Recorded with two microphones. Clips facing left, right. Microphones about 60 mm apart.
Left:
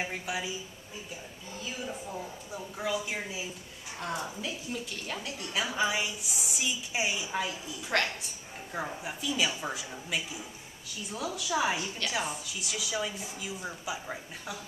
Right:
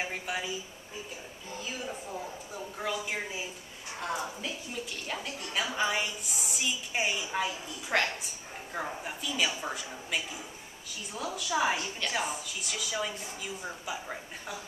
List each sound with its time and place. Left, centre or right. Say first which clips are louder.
0.0 s a woman's voice: even; centre
1.5 s a woman's voice: even; centre